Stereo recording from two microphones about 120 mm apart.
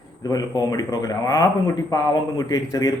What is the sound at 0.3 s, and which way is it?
A man's voice, 30° left (ahead or behind).